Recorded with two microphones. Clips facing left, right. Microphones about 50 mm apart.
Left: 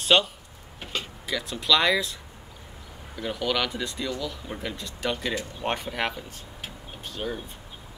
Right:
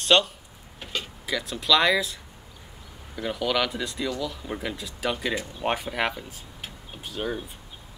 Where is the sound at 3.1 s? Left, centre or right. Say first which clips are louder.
Right 1 dB; centre.